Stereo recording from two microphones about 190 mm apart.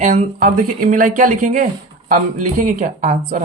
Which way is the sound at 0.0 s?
45° right (ahead or behind).